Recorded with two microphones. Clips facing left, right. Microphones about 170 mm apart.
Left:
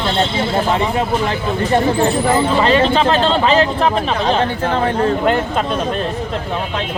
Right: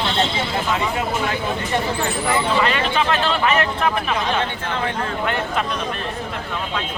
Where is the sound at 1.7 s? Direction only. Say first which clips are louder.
Left 10 dB; 40° left (ahead or behind).